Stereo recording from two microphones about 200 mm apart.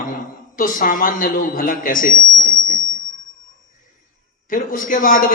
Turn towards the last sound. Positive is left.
turn(degrees=40)  # may be behind; listen again after turning